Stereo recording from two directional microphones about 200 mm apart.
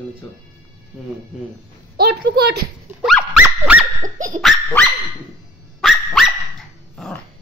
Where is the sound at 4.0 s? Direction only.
40° right (ahead or behind).